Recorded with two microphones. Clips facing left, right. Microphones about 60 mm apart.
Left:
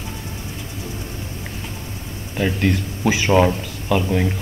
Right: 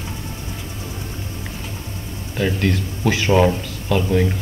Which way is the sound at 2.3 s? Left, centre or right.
Centre.